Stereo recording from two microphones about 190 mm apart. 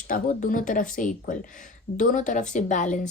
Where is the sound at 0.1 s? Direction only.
45° left (ahead or behind).